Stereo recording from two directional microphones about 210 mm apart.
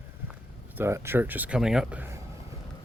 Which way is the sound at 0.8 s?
10° right (ahead or behind).